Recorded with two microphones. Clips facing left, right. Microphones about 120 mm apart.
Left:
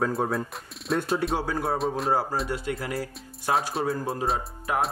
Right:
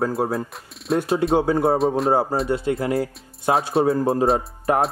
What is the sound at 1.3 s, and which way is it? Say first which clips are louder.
Speech: right 9 dB; 25° right (ahead or behind).